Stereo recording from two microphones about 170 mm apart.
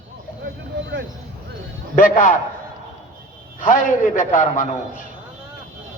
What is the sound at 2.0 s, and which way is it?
Speech, 50° left (ahead or behind).